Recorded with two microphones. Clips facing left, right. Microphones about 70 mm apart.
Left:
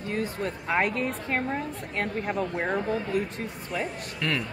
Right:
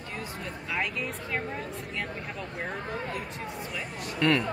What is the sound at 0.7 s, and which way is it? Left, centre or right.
Speech, left.